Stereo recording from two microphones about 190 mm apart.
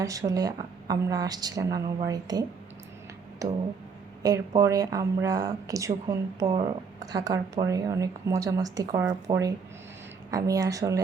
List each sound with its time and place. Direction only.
0.0 s speech: 15° right (ahead or behind)
4.2 s a woman's voice: 20° right (ahead or behind)